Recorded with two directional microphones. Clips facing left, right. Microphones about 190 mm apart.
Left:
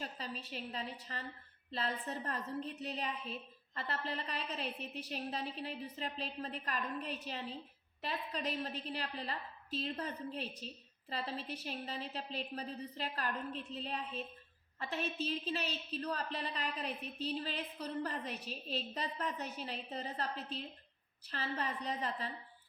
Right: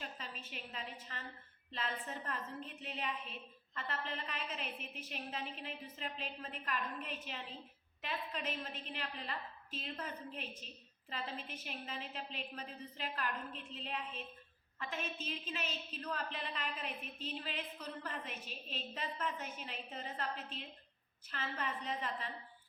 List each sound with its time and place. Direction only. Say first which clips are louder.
0.0 s a woman's voice: left 4 dB; 35° left (ahead or behind)